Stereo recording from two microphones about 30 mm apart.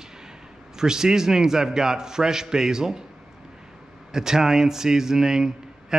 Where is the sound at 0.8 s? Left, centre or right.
Centre.